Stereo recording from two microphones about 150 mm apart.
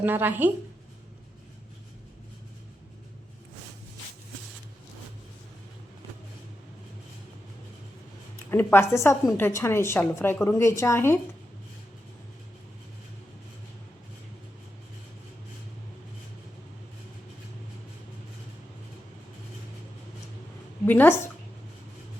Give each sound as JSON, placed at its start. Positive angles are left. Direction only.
{"t": 0.0, "sound": "a woman's voice", "side_deg": -15}
{"t": 8.4, "sound": "a woman's voice", "side_deg": 15}
{"t": 20.8, "sound": "a woman's voice", "side_deg": 15}